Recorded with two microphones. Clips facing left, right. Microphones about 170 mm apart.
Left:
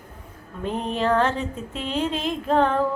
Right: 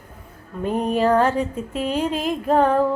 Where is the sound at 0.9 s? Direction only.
10° right (ahead or behind).